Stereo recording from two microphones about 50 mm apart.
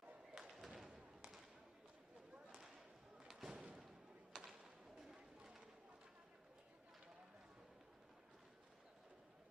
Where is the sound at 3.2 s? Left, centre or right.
Centre.